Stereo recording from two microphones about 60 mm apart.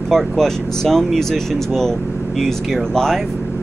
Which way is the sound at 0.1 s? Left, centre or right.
Centre.